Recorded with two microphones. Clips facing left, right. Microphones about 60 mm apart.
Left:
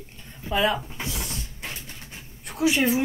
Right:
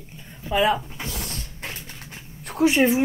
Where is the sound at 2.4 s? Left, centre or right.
Right.